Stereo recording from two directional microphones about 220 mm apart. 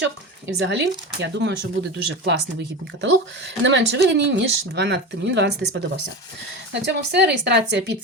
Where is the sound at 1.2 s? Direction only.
50° right (ahead or behind).